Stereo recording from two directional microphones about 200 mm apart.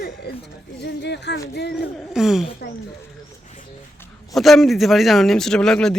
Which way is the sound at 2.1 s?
5° right (ahead or behind).